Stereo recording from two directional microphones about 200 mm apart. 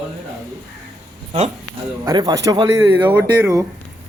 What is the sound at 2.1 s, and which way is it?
Speech, 20° right (ahead or behind).